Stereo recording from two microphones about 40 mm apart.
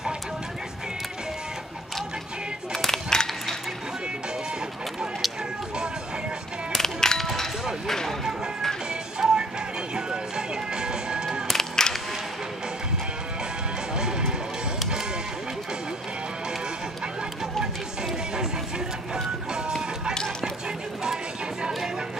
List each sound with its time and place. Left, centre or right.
2.7 s a sound: centre
6.7 s music: centre
7.8 s a sound: centre
9.2 s music: centre
11.4 s music: centre
13.9 s music: centre